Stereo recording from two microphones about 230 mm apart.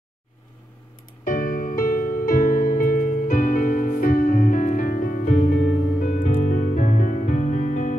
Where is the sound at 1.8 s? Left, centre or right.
Left.